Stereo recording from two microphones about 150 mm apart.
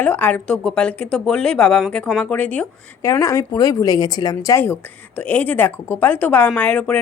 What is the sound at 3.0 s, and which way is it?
Speech, 20° left (ahead or behind).